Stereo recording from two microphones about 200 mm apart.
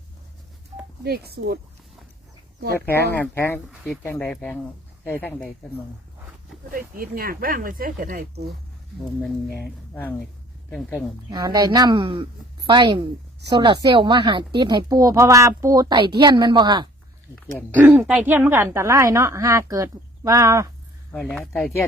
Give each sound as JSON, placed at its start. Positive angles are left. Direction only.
{"t": 0.7, "sound": "telephone dialing", "side_deg": -35}
{"t": 1.0, "sound": "speech", "side_deg": -55}
{"t": 2.7, "sound": "speech", "side_deg": 10}
{"t": 6.7, "sound": "speech", "side_deg": -45}
{"t": 9.6, "sound": "speech", "side_deg": 10}
{"t": 11.3, "sound": "a woman's voice", "side_deg": -20}
{"t": 17.6, "sound": "a woman's voice", "side_deg": -10}
{"t": 21.1, "sound": "speech", "side_deg": 5}